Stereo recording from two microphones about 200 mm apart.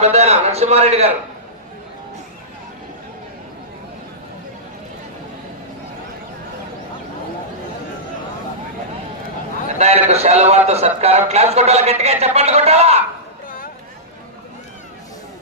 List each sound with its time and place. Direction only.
0.0 s a man's voice: 35° right (ahead or behind)
9.7 s a man's voice: 35° right (ahead or behind)